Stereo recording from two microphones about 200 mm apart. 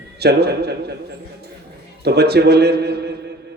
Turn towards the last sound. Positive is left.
turn(degrees=-55)  # may be behind; listen again after turning